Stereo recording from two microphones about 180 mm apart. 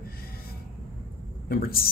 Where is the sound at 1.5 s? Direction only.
55° left (ahead or behind).